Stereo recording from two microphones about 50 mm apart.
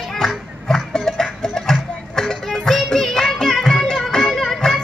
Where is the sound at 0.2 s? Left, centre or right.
Centre.